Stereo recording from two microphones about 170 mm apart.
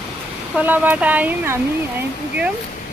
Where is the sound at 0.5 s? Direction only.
10° right (ahead or behind).